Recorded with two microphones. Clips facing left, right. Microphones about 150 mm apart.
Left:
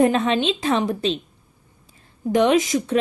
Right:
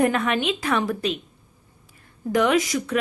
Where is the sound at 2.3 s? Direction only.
20° left (ahead or behind).